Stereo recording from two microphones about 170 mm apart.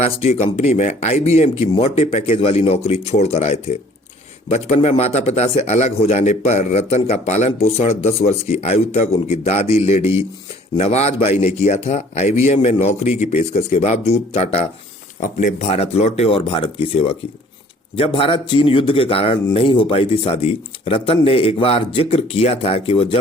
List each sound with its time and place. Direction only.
0.0 s a man's voice: 40° left (ahead or behind)
10.0 s speech: 15° right (ahead or behind)
10.8 s a man's voice: 40° left (ahead or behind)